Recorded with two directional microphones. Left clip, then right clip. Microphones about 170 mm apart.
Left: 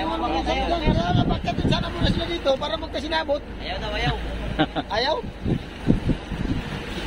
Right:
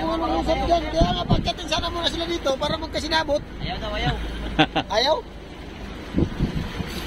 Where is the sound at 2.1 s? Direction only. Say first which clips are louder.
Left 3 dB; 30° right (ahead or behind).